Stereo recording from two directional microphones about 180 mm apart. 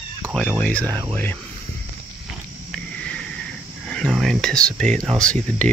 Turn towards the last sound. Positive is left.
turn(degrees=5)  # may be behind; listen again after turning